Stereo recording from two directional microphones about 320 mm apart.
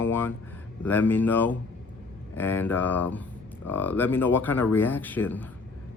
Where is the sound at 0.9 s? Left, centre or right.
Centre.